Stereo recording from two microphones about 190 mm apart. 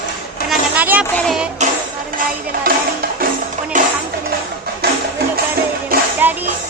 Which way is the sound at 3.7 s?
40° right (ahead or behind).